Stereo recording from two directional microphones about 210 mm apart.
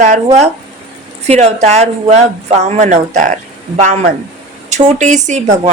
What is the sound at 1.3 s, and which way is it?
Speech, 30° right (ahead or behind).